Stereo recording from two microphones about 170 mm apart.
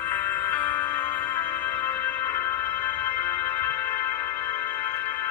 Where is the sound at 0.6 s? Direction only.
10° left (ahead or behind).